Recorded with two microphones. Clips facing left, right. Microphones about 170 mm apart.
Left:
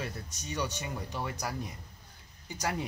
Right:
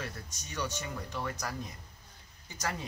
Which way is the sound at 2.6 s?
15° left (ahead or behind).